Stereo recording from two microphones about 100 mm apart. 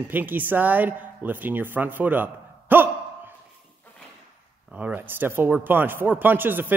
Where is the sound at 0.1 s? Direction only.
20° right (ahead or behind).